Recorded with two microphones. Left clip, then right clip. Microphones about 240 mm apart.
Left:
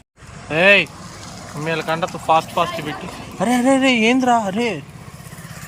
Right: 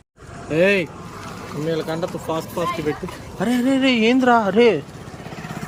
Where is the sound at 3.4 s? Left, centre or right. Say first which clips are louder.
Left 4 dB; centre.